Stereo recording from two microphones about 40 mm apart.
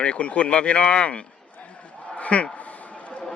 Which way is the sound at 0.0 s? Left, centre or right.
Left.